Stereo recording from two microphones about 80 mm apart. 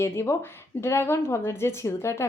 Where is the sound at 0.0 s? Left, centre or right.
Left.